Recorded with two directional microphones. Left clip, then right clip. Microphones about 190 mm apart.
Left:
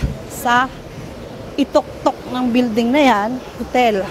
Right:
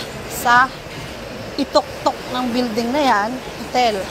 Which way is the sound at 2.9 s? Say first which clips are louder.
Left 2 dB; 35° left (ahead or behind).